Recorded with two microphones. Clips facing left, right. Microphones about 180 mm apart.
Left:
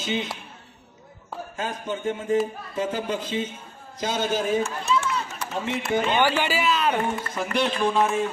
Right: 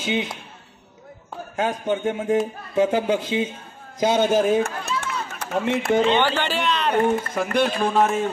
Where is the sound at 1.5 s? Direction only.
60° right (ahead or behind).